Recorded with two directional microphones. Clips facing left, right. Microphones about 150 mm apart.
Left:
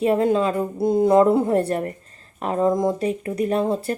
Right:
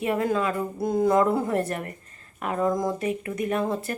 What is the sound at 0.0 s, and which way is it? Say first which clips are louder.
Speech: left 6 dB; 30° left (ahead or behind).